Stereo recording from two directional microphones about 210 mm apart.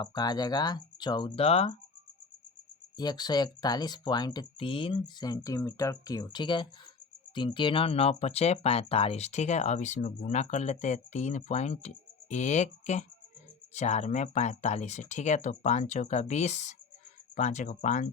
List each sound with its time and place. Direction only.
0.0 s speech: 20° left (ahead or behind)
3.0 s speech: 20° left (ahead or behind); by 18.1 s 35° left (ahead or behind)